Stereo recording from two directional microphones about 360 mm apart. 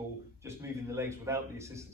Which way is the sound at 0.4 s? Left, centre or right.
Centre.